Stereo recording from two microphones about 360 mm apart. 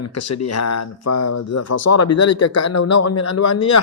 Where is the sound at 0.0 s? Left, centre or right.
Left.